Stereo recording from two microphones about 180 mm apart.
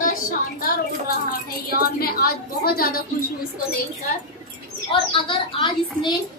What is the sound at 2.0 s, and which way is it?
Speech, 60° left (ahead or behind).